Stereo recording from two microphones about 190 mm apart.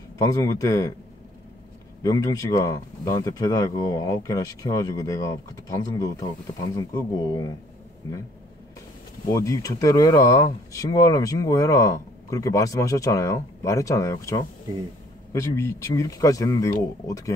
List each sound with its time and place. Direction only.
0.2 s speech: 15° left (ahead or behind)
2.0 s speech: 20° left (ahead or behind)
9.3 s speech: 15° left (ahead or behind)